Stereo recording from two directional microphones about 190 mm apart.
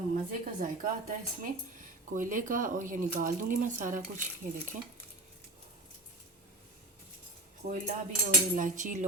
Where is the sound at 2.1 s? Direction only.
45° right (ahead or behind).